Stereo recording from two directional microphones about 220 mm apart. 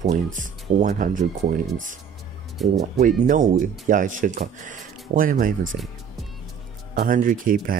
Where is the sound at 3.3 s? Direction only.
35° right (ahead or behind).